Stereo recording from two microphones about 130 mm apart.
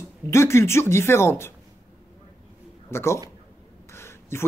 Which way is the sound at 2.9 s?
20° left (ahead or behind).